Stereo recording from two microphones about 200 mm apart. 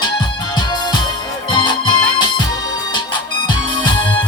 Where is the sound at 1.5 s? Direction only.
20° left (ahead or behind).